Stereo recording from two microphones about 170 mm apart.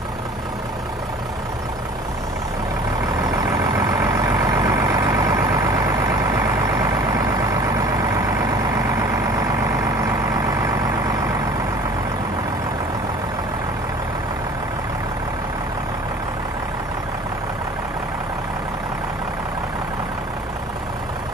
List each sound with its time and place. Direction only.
3.5 s vehicle: 15° right (ahead or behind)
10.6 s vehicle: 20° right (ahead or behind)